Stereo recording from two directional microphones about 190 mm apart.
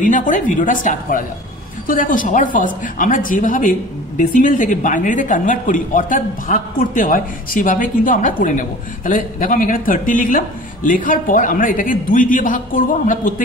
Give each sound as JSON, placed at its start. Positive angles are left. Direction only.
{"t": 0.0, "sound": "a woman's voice", "side_deg": 40}